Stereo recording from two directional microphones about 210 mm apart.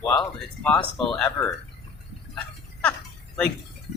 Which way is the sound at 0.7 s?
5° left (ahead or behind).